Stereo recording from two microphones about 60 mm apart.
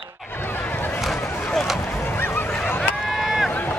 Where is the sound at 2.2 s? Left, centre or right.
Left.